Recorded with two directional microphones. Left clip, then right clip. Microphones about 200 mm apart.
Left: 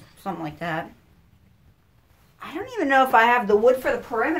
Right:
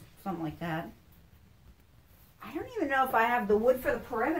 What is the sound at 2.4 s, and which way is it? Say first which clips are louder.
Speech: left 8 dB; 10° left (ahead or behind).